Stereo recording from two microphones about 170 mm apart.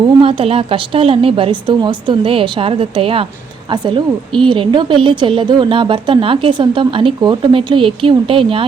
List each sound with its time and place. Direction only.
0.0 s a woman's voice: 30° right (ahead or behind)